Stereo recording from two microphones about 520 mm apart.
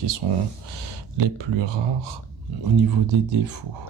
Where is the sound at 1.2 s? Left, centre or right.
Right.